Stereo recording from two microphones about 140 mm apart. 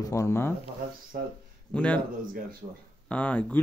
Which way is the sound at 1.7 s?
10° left (ahead or behind).